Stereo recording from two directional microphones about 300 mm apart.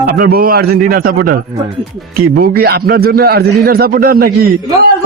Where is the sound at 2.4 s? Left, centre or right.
Right.